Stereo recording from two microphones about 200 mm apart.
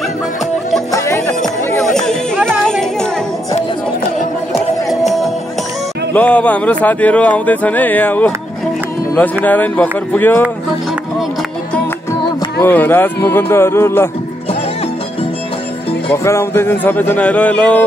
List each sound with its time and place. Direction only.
0.9 s music: 15° left (ahead or behind)
1.4 s music: centre (ahead or behind)
4.8 s music: centre (ahead or behind)
12.5 s music: 10° left (ahead or behind)
16.1 s music: 10° left (ahead or behind)